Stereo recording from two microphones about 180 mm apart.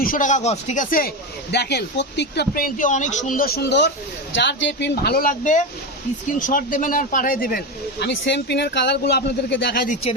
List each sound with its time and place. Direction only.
0.0 s speech: 50° left (ahead or behind)